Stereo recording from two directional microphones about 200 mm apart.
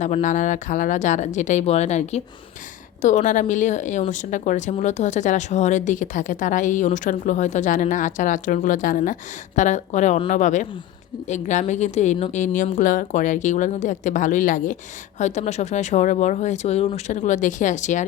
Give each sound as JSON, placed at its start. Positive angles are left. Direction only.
{"t": 0.0, "sound": "speech", "side_deg": 35}